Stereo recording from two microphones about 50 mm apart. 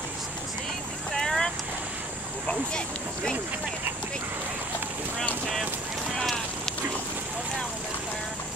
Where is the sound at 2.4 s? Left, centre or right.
Centre.